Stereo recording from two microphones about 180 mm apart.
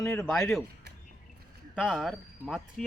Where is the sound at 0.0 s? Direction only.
15° left (ahead or behind).